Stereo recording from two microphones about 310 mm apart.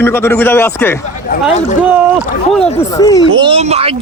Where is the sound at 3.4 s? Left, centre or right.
Centre.